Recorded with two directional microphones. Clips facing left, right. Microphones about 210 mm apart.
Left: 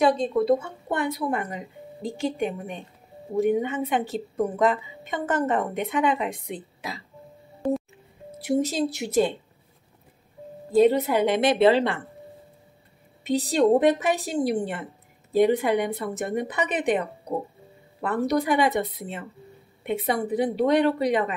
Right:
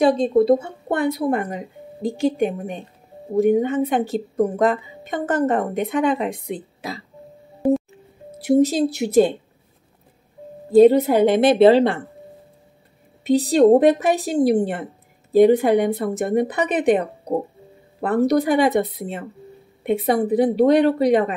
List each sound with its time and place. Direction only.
0.0 s a woman's voice: 35° right (ahead or behind)
7.6 s music: 10° right (ahead or behind)
8.5 s a woman's voice: 35° right (ahead or behind)
10.8 s a woman's voice: 40° right (ahead or behind)
13.2 s a woman's voice: 35° right (ahead or behind)